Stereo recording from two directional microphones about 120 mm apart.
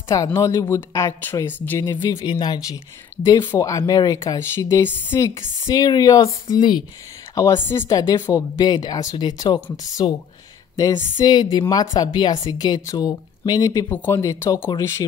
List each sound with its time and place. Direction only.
0.1 s speech: 25° left (ahead or behind)
2.2 s speech: 40° left (ahead or behind)
13.8 s speech: 15° left (ahead or behind)